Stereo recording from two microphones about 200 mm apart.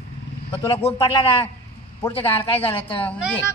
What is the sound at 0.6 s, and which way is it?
Speech, 25° left (ahead or behind).